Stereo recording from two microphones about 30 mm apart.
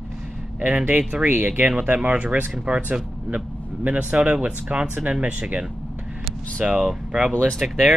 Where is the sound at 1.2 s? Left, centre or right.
Right.